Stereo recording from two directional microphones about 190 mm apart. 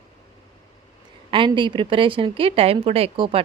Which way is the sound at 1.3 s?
25° right (ahead or behind).